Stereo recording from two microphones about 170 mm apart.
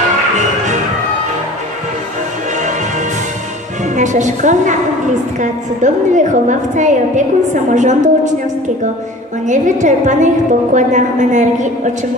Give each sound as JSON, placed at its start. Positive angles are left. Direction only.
{"t": 3.9, "sound": "a woman's voice", "side_deg": -45}